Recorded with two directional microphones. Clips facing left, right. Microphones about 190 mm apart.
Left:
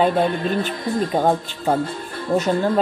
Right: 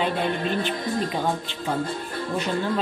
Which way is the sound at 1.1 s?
45° left (ahead or behind).